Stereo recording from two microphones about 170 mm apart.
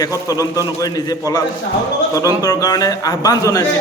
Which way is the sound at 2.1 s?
20° left (ahead or behind).